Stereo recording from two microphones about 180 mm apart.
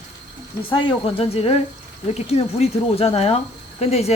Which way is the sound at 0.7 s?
30° left (ahead or behind).